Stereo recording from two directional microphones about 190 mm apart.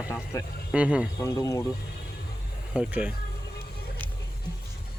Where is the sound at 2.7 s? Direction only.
5° right (ahead or behind).